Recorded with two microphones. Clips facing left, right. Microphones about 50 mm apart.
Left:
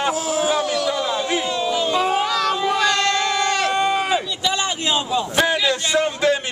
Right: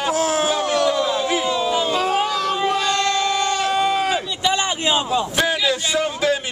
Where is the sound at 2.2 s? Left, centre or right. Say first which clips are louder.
Even; left.